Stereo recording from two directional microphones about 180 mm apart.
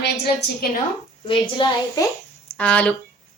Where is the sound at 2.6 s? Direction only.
5° left (ahead or behind).